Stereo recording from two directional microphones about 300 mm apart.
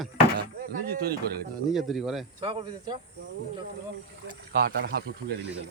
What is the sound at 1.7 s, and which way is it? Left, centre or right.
Speech, centre.